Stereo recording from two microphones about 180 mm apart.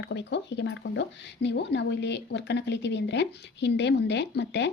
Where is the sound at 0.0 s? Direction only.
70° left (ahead or behind).